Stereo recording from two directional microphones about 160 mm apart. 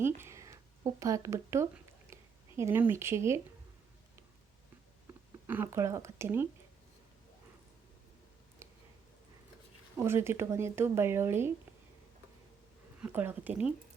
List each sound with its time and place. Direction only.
0.0 s speech: 15° right (ahead or behind)
5.5 s speech: 15° right (ahead or behind)
8.6 s a sound: 15° right (ahead or behind)
10.0 s speech: 15° right (ahead or behind)
13.0 s speech: 10° right (ahead or behind)